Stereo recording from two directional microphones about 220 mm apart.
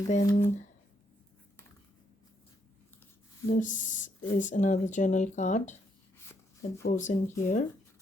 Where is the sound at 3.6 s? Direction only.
35° left (ahead or behind).